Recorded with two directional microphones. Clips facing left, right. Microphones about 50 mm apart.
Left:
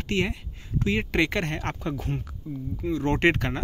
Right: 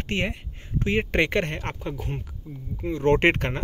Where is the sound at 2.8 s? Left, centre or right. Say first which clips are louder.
Right 3 dB; right.